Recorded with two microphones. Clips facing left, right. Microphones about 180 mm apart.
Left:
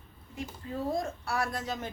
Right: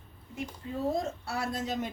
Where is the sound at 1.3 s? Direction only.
25° right (ahead or behind).